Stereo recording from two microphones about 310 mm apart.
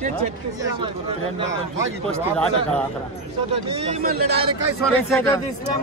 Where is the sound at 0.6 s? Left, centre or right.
Centre.